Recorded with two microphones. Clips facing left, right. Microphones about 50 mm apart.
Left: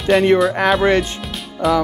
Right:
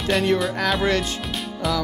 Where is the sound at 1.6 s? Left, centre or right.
Centre.